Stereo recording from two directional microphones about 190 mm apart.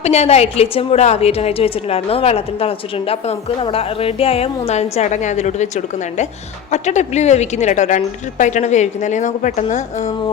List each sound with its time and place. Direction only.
0.0 s a woman's voice: 35° left (ahead or behind)